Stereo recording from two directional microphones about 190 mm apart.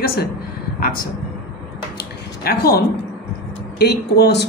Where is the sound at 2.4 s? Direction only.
55° left (ahead or behind).